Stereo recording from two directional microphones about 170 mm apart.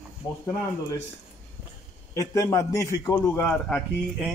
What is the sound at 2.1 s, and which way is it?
A man's voice, 20° left (ahead or behind).